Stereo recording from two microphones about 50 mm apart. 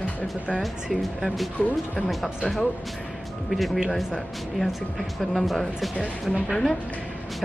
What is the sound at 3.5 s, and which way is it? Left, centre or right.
Speech, centre.